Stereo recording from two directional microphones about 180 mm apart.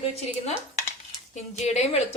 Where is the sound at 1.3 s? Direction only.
40° left (ahead or behind).